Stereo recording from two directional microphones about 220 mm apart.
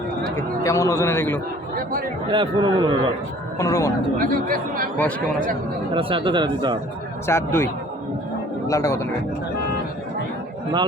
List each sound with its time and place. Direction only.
0.3 s a man's voice: 15° left (ahead or behind)
2.3 s speech: 20° right (ahead or behind)
3.6 s a man's voice: 15° left (ahead or behind)
4.2 s speech: 40° right (ahead or behind)
4.9 s a man's voice: 5° left (ahead or behind)
5.9 s speech: 25° right (ahead or behind)
7.3 s a man's voice: 10° left (ahead or behind)